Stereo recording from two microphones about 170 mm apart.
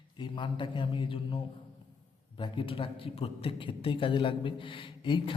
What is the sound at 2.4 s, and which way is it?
A man's voice, 30° left (ahead or behind).